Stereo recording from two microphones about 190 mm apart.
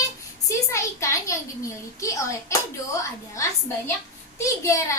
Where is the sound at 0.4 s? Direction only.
15° left (ahead or behind).